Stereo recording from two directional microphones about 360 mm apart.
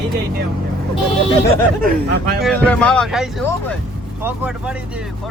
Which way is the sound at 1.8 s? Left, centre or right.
Right.